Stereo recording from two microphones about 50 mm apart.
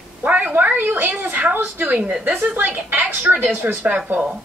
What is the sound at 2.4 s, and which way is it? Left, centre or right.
Speech, right.